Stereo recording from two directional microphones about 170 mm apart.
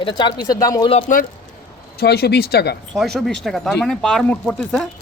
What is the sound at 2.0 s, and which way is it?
Speech, 70° left (ahead or behind).